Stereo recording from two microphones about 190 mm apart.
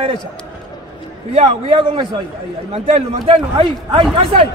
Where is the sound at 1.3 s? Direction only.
30° right (ahead or behind).